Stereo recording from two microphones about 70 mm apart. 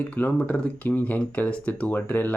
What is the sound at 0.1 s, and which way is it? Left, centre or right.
Speech, left.